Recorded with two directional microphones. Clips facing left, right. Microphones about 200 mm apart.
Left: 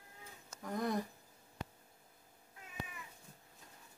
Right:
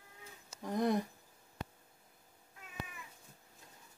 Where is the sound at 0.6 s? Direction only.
20° right (ahead or behind).